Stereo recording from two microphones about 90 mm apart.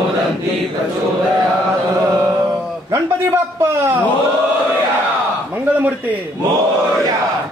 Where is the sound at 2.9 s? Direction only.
30° right (ahead or behind).